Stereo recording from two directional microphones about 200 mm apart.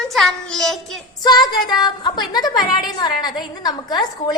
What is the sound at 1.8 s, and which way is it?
A woman's voice, 20° left (ahead or behind).